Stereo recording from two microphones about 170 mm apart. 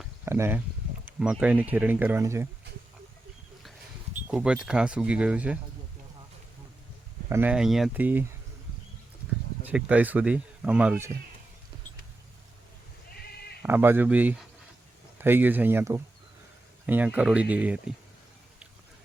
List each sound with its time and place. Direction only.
0.3 s speech: 15° right (ahead or behind)
4.3 s speech: 5° right (ahead or behind)
7.3 s speech: 10° right (ahead or behind)
9.6 s speech: 10° right (ahead or behind)
13.1 s sheep: 65° left (ahead or behind)
13.6 s speech: 10° right (ahead or behind)